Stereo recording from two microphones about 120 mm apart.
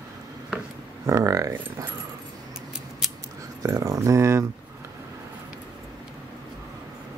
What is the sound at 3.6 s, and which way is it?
Speech, 30° right (ahead or behind).